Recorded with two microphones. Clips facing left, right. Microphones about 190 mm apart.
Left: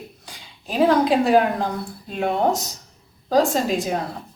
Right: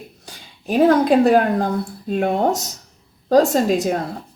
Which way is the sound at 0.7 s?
50° right (ahead or behind).